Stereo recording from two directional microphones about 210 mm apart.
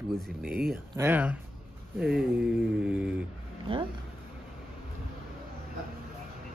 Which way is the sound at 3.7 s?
25° right (ahead or behind).